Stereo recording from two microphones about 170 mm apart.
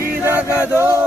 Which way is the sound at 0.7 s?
15° right (ahead or behind).